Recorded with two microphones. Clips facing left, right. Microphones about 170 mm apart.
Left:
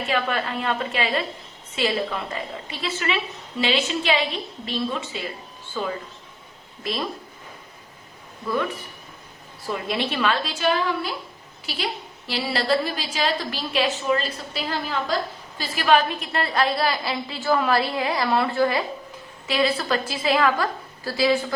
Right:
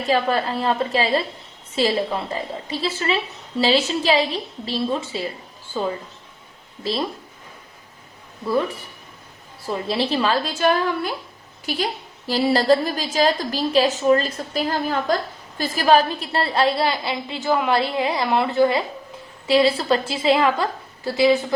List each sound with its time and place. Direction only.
0.0 s a woman's voice: 35° right (ahead or behind)
9.6 s a woman's voice: 30° right (ahead or behind)